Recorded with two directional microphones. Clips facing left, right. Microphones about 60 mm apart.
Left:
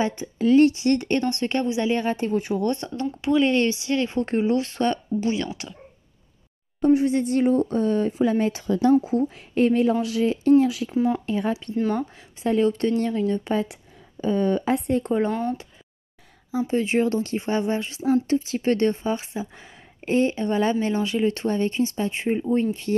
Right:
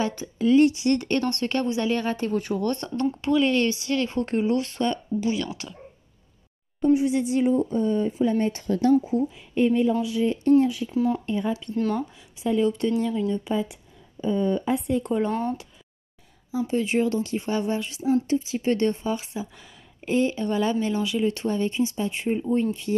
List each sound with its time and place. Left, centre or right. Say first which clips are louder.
0.0 s speech: left 2 dB; left
0.4 s speech: left 2 dB; left; by 3.3 s centre
3.3 s speech: left 3 dB; left
4.8 s speech: left 2 dB; left
6.9 s speech: left 2 dB; left
9.1 s speech: left 2 dB; left
11.1 s speech: left 2 dB; left
12.4 s speech: left 2 dB; left
14.2 s speech: left 2 dB; left
15.0 s speech: left 2 dB; left
16.5 s speech: left 2 dB; left
18.0 s speech: left 2 dB; left
20.1 s speech: left 2 dB; left
22.2 s speech: left 1 dB; left